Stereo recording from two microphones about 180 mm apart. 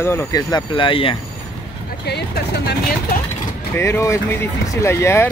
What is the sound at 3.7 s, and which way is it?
Speech, 15° left (ahead or behind).